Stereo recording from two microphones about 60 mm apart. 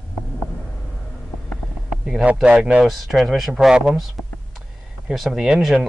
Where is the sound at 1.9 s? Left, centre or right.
Centre.